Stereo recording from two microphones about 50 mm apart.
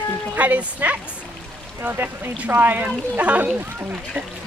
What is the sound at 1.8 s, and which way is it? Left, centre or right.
Speech, right.